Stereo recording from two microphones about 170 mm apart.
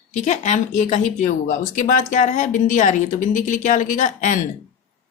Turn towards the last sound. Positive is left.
turn(degrees=50)  # may be behind; listen again after turning